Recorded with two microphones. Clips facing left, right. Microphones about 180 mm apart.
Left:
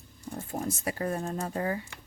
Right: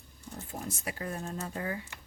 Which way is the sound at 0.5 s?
45° left (ahead or behind).